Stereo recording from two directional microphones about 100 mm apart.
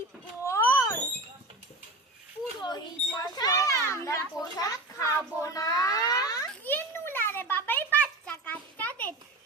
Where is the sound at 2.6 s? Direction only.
45° left (ahead or behind).